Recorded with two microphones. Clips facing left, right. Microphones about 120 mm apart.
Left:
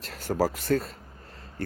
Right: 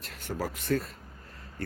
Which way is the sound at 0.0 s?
35° left (ahead or behind).